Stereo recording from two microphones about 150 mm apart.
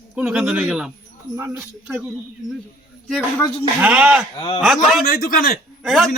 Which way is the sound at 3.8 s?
10° right (ahead or behind).